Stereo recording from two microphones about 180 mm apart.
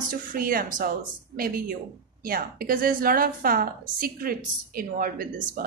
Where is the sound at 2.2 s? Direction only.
55° right (ahead or behind).